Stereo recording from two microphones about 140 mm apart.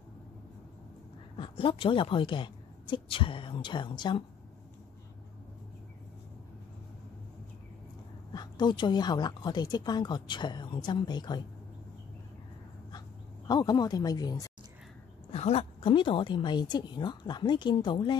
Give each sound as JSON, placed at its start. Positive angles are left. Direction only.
{"t": 1.3, "sound": "speech", "side_deg": 40}
{"t": 8.3, "sound": "speech", "side_deg": 30}
{"t": 13.5, "sound": "speech", "side_deg": 30}
{"t": 15.3, "sound": "speech", "side_deg": 50}